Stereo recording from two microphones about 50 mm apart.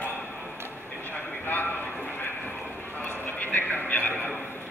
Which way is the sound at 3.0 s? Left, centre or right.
Left.